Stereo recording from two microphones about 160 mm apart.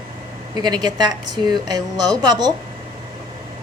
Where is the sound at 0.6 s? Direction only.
25° right (ahead or behind).